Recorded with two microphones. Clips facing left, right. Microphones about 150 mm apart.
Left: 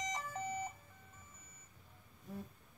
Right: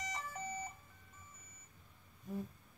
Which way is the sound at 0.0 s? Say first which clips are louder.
Left 3 dB; 15° left (ahead or behind).